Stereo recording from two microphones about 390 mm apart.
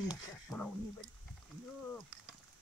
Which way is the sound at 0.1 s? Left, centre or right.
Centre.